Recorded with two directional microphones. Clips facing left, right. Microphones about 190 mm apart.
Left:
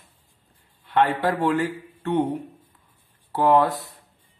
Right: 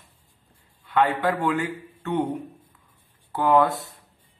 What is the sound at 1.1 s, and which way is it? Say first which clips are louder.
Speech: left 2 dB; 35° left (ahead or behind).